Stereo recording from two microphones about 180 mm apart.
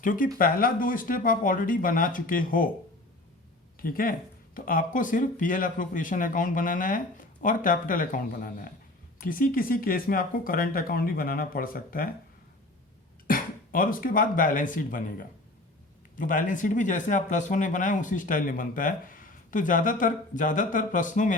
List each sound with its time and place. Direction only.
0.0 s speech: 50° left (ahead or behind)
3.8 s speech: 50° left (ahead or behind)
13.2 s speech: 50° left (ahead or behind)